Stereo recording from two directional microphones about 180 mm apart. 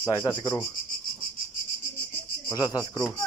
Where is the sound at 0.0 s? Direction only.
15° left (ahead or behind).